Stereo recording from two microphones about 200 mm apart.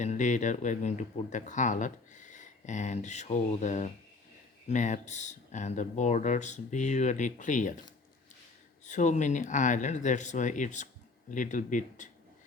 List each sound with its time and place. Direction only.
0.0 s speech: 35° left (ahead or behind)
8.8 s speech: 35° left (ahead or behind)